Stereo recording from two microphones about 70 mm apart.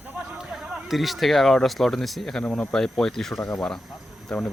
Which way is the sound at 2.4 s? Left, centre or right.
Centre.